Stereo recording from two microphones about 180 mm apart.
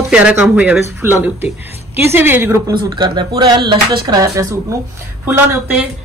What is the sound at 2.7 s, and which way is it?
Speech, 25° right (ahead or behind).